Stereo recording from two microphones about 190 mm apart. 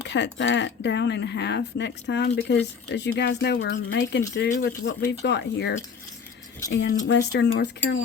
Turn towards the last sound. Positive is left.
turn(degrees=65)  # may be behind; listen again after turning